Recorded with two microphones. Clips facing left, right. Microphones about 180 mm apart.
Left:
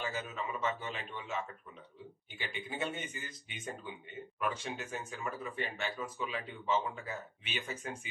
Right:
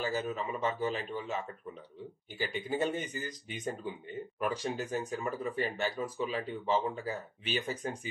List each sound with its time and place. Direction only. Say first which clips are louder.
0.0 s speech: right 5 dB; 35° right (ahead or behind)